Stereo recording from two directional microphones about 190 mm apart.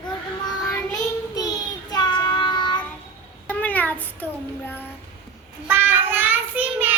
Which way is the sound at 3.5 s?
10° left (ahead or behind).